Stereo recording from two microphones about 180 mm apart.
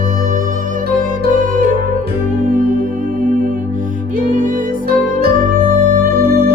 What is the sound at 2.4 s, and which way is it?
Music, 50° right (ahead or behind).